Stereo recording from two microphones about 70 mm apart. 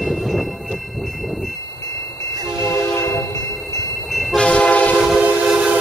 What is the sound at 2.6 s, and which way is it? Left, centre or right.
Train, left.